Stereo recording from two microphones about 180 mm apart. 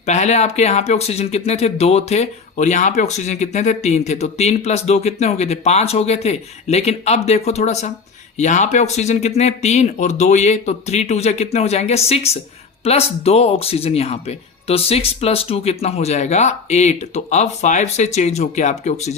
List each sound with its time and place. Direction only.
0.0 s speech: 40° left (ahead or behind)